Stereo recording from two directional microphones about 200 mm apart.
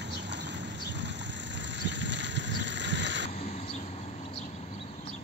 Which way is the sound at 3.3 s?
30° left (ahead or behind).